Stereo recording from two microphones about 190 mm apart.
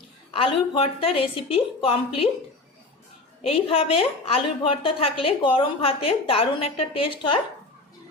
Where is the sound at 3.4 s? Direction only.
30° left (ahead or behind).